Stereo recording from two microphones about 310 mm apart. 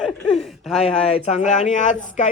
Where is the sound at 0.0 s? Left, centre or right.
Centre.